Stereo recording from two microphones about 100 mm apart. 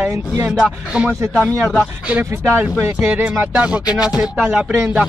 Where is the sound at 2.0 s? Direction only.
15° right (ahead or behind).